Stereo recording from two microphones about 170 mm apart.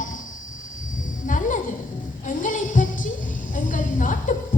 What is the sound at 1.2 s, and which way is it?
Music, 50° left (ahead or behind).